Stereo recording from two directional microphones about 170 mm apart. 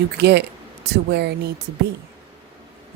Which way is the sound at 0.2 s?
75° right (ahead or behind).